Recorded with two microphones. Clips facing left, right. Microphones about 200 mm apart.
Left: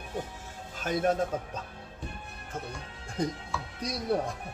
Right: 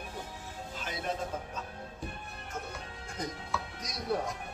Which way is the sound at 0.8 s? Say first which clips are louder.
Left 10 dB; 50° left (ahead or behind).